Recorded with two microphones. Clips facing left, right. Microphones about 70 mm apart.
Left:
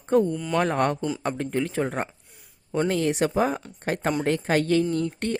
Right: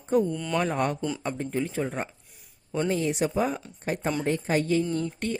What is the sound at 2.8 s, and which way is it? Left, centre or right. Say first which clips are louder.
Speech: left 2 dB; left.